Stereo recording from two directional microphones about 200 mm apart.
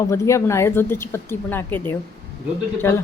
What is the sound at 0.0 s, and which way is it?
Speech, 15° left (ahead or behind).